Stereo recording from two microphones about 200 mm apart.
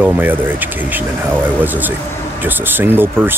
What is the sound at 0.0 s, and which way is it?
Speech, 10° right (ahead or behind).